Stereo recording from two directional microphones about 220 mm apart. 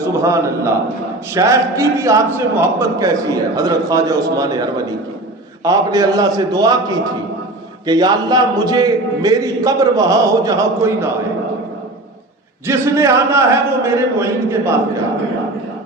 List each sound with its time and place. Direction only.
0.0 s a man's voice: 15° right (ahead or behind)
7.9 s a man's voice: 20° right (ahead or behind)
12.6 s a man's voice: 15° right (ahead or behind)